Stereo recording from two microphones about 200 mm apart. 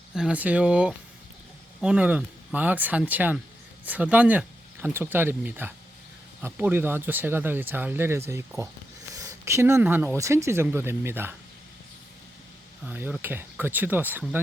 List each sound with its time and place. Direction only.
0.1 s speech: 5° right (ahead or behind)
12.8 s speech: 10° right (ahead or behind)